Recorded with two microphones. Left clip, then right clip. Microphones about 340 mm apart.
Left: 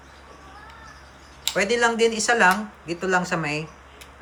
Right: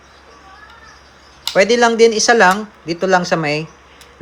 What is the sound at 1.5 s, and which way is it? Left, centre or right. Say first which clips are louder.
Speech: right 9 dB; centre.